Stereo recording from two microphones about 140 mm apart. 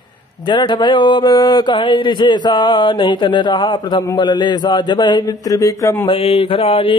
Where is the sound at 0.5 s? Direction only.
35° left (ahead or behind).